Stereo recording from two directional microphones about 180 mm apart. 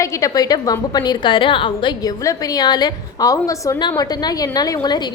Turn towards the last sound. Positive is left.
turn(degrees=25)  # may be behind; listen again after turning